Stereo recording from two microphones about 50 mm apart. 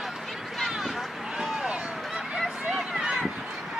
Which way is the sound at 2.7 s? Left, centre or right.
Centre.